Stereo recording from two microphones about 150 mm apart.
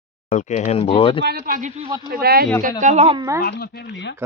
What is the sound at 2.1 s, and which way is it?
Speech, 90° right.